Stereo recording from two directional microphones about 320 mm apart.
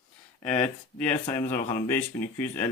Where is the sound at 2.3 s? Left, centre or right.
Centre.